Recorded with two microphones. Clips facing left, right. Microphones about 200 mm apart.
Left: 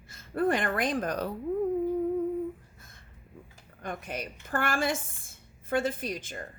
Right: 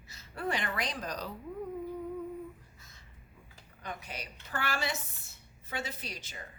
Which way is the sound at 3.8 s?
50° left (ahead or behind).